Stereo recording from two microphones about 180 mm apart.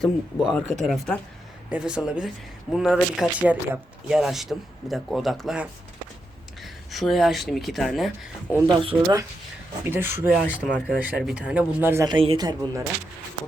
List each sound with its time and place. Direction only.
0.0 s speech: centre (ahead or behind)
8.6 s speech: 25° right (ahead or behind)
9.8 s speech: 10° right (ahead or behind)
12.0 s speech: 30° right (ahead or behind)